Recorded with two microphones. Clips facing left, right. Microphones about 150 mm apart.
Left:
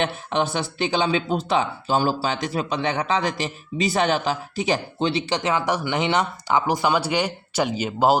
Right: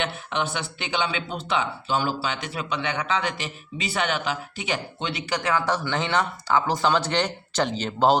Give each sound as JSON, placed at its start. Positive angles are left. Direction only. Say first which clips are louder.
{"t": 0.0, "sound": "speech", "louder": "left 4 dB", "side_deg": 35}